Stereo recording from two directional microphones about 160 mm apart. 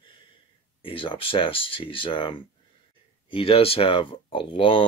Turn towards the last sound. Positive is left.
turn(degrees=35)  # may be behind; listen again after turning